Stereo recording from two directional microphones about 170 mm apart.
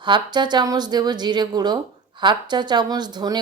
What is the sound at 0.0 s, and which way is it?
Speech, 25° right (ahead or behind).